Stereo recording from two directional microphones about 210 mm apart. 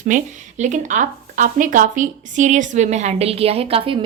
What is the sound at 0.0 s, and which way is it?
A woman's voice, 35° right (ahead or behind).